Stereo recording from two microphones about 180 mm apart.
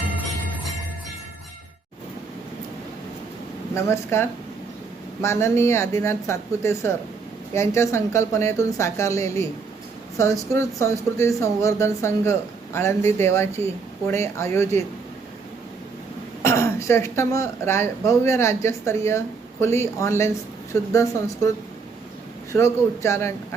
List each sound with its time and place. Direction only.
3.8 s speech: 15° left (ahead or behind)
16.4 s speech: 15° left (ahead or behind)
22.5 s speech: 15° left (ahead or behind)